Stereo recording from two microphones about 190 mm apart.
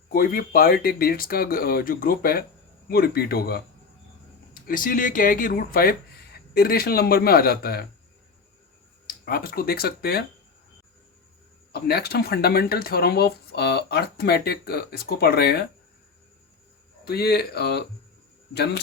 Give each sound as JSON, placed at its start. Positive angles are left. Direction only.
{"t": 0.1, "sound": "speech", "side_deg": 50}
{"t": 4.6, "sound": "speech", "side_deg": 45}
{"t": 9.0, "sound": "speech", "side_deg": 50}
{"t": 11.7, "sound": "speech", "side_deg": 55}
{"t": 17.1, "sound": "speech", "side_deg": 55}